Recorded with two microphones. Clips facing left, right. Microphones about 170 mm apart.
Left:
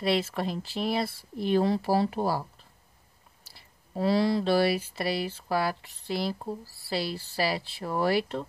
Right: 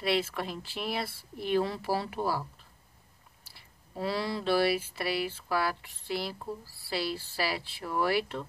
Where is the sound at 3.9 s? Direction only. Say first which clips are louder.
Left 7 dB; 40° left (ahead or behind).